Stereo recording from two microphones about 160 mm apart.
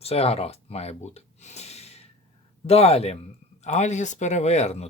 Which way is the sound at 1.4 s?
45° left (ahead or behind).